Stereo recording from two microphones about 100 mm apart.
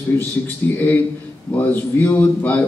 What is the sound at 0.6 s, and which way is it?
A man's voice, 25° left (ahead or behind).